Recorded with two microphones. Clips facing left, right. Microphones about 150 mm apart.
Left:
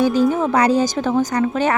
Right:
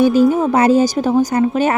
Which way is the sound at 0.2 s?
20° right (ahead or behind).